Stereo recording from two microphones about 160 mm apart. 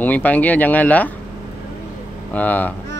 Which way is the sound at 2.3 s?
10° left (ahead or behind).